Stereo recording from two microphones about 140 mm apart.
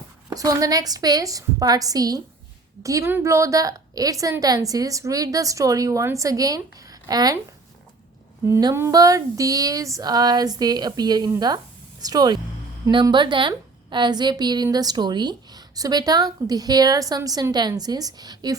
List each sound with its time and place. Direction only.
0.3 s a woman's voice: 25° right (ahead or behind)
8.4 s a woman's voice: 20° right (ahead or behind)